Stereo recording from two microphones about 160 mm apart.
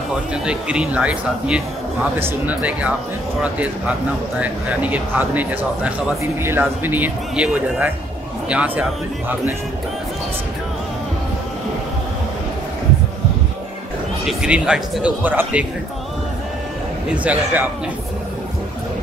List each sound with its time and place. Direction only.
0.3 s speech: 5° right (ahead or behind)
14.2 s speech: 5° right (ahead or behind)
17.1 s speech: 10° right (ahead or behind)